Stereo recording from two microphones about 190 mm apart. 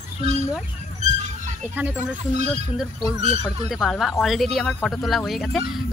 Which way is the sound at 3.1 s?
35° right (ahead or behind).